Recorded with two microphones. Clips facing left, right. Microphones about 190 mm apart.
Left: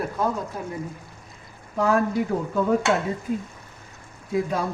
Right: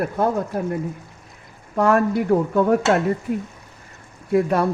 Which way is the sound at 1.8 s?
65° right (ahead or behind).